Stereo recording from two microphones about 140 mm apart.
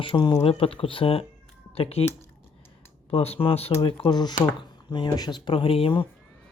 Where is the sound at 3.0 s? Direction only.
45° left (ahead or behind).